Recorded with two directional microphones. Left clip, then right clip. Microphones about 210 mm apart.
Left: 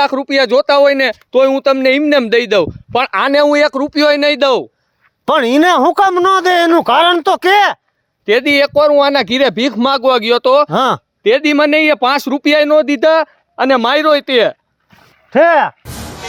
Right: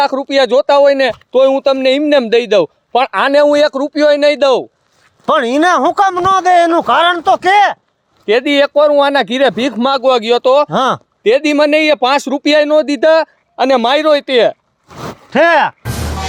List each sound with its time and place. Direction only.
0.0 s a man's voice: 35° left (ahead or behind)
15.8 s music: centre (ahead or behind)